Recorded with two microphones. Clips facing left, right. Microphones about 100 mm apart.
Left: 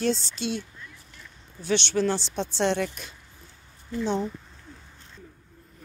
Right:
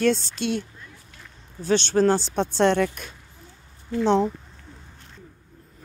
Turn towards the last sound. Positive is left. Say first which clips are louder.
# right 7 dB
turn(degrees=-80)